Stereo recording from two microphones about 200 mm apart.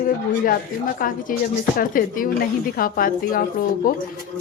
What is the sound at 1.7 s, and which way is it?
Speech, 45° left (ahead or behind).